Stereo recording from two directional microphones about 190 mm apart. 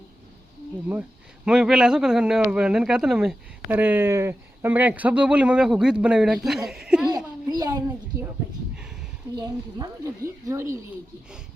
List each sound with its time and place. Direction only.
1.5 s a man's voice: 5° right (ahead or behind)
6.7 s chuckle: 5° right (ahead or behind)
7.4 s a sound: 20° right (ahead or behind)
9.3 s a woman's voice: 20° right (ahead or behind)